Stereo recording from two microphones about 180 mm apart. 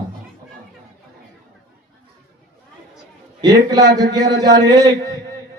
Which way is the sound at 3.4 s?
20° right (ahead or behind).